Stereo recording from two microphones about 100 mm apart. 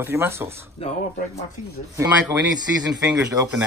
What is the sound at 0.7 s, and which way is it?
Speech, 90° left.